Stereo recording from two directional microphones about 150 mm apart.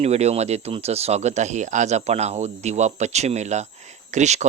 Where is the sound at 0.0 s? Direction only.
45° right (ahead or behind).